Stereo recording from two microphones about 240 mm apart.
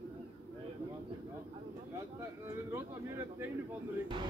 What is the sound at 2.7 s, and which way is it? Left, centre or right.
Speech, centre.